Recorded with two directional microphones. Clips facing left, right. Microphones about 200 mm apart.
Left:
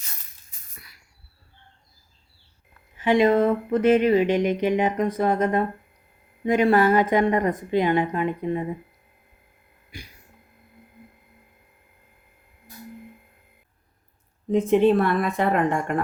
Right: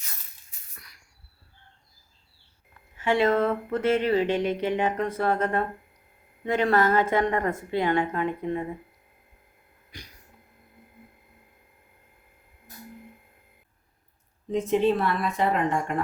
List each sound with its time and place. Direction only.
0.8 s a sound: 5° left (ahead or behind)
3.0 s speech: 15° left (ahead or behind)
14.5 s a woman's voice: 55° left (ahead or behind)